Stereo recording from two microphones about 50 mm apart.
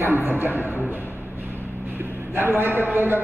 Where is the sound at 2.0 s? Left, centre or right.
Right.